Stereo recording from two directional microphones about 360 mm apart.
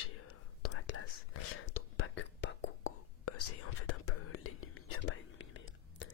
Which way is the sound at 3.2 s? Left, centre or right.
Left.